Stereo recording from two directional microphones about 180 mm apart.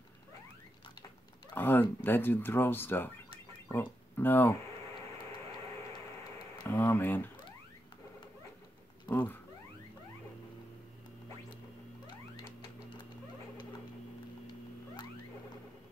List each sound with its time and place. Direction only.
1.5 s turkey: 10° left (ahead or behind)
3.6 s speech: 10° left (ahead or behind)
6.7 s turkey: 10° left (ahead or behind)
9.1 s turkey: 10° left (ahead or behind)